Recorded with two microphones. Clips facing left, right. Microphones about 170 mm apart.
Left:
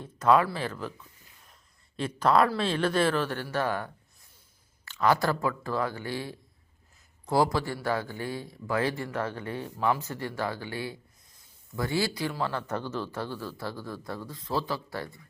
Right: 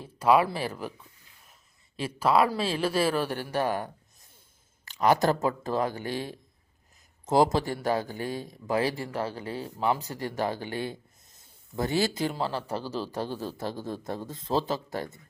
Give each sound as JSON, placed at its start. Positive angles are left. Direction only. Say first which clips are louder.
{"t": 0.0, "sound": "speech", "louder": "right 1 dB", "side_deg": -10}
{"t": 4.9, "sound": "speech", "louder": "right 2 dB", "side_deg": -15}
{"t": 9.0, "sound": "speech", "louder": "even", "side_deg": -30}
{"t": 9.7, "sound": "speech", "louder": "even", "side_deg": -20}
{"t": 10.3, "sound": "a sound", "louder": "right 4 dB", "side_deg": -20}
{"t": 12.1, "sound": "speech", "louder": "right 1 dB", "side_deg": -20}
{"t": 13.1, "sound": "a man's voice", "louder": "right 3 dB", "side_deg": -15}